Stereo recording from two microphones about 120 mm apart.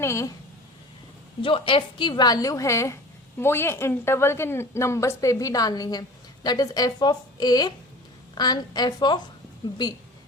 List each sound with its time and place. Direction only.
0.0 s a woman's voice: 25° left (ahead or behind)
1.4 s a woman's voice: 45° left (ahead or behind)